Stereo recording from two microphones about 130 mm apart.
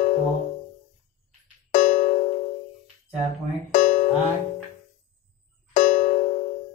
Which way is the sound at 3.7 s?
75° left (ahead or behind).